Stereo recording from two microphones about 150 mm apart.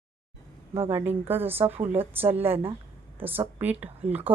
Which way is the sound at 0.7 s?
15° right (ahead or behind).